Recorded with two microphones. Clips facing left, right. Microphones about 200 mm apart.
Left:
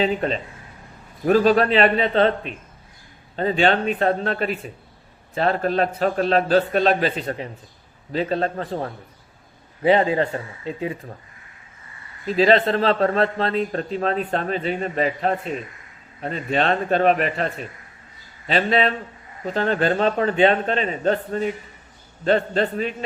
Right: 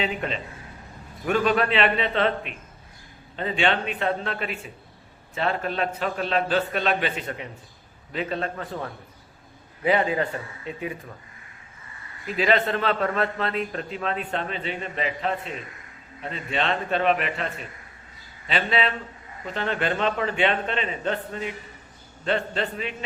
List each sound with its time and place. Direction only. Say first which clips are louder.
0.0 s a man's voice: left 6 dB; 35° left (ahead or behind)
12.2 s a man's voice: left 6 dB; 35° left (ahead or behind)